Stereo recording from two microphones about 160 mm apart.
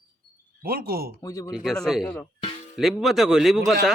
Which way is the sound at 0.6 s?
70° right (ahead or behind).